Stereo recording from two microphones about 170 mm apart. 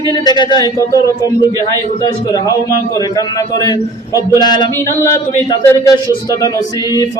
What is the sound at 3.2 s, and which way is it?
A man's voice, 20° left (ahead or behind).